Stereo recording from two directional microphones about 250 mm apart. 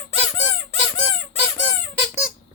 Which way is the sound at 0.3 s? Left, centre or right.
Left.